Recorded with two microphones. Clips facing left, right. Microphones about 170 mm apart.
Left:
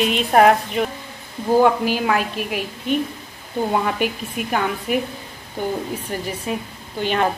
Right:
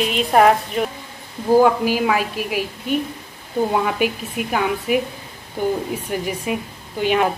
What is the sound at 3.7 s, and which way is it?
Speech, 5° right (ahead or behind).